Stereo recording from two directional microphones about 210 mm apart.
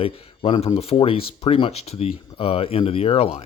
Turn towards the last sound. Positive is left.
turn(degrees=30)  # may be behind; listen again after turning